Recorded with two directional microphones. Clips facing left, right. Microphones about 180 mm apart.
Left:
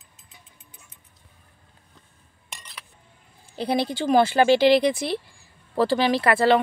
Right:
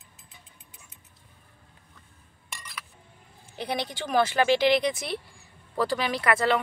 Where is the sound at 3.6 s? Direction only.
30° left (ahead or behind).